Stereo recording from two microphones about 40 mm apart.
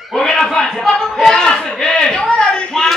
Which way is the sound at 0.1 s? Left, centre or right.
Centre.